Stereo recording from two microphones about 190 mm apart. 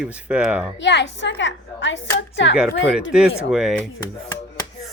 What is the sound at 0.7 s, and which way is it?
A woman's voice, 70° left (ahead or behind).